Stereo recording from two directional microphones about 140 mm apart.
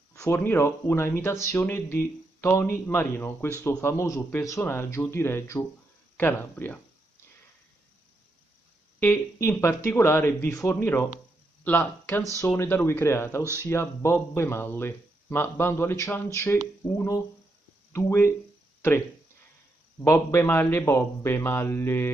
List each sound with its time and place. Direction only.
0.1 s speech: 20° left (ahead or behind)
9.0 s speech: 15° left (ahead or behind)
13.4 s speech: 20° right (ahead or behind)
13.7 s speech: 20° left (ahead or behind)
20.0 s speech: 20° left (ahead or behind)